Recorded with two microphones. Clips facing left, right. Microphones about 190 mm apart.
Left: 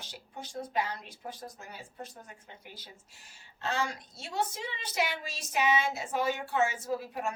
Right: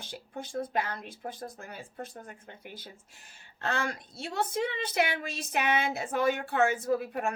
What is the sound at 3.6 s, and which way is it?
A woman's voice, 55° right (ahead or behind).